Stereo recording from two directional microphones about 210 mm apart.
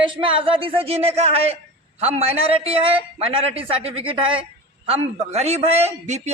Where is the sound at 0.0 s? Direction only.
25° right (ahead or behind).